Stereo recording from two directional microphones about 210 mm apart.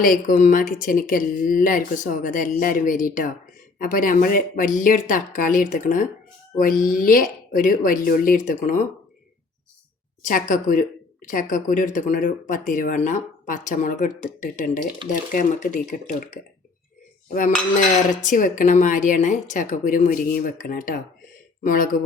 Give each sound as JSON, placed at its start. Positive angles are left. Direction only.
{"t": 0.0, "sound": "speech", "side_deg": 40}
{"t": 10.2, "sound": "speech", "side_deg": 40}
{"t": 18.2, "sound": "speech", "side_deg": 40}